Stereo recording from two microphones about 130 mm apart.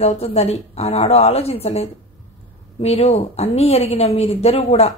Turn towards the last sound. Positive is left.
turn(degrees=55)  # may be behind; listen again after turning